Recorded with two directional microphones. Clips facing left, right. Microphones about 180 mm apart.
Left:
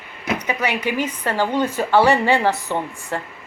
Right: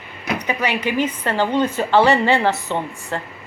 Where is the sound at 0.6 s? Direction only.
10° left (ahead or behind).